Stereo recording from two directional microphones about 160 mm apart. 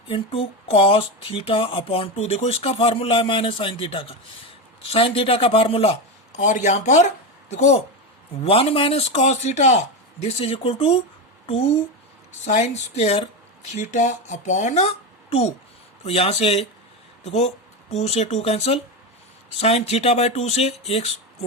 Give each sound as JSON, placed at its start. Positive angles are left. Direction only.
{"t": 0.1, "sound": "speech", "side_deg": 35}
{"t": 12.5, "sound": "speech", "side_deg": 45}